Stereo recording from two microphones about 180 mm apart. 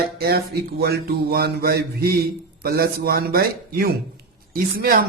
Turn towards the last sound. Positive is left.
turn(degrees=-55)  # may be behind; listen again after turning